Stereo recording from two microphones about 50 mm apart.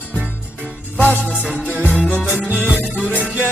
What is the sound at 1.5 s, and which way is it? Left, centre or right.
Music, right.